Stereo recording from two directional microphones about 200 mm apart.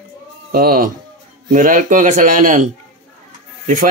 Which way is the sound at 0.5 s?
50° right (ahead or behind).